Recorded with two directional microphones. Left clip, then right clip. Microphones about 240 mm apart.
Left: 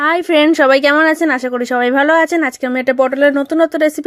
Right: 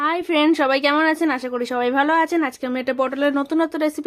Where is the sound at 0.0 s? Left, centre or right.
Left.